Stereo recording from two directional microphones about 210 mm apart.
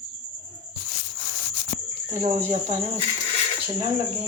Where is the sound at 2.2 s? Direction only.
30° right (ahead or behind).